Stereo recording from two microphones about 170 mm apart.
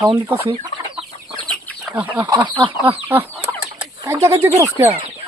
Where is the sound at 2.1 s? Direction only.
25° right (ahead or behind).